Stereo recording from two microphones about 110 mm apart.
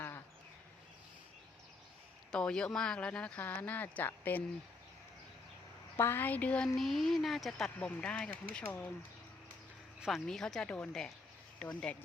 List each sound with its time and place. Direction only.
2.3 s speech: 5° left (ahead or behind)
6.0 s speech: 20° left (ahead or behind)
6.7 s speech: centre (ahead or behind)
10.2 s speech: 5° left (ahead or behind)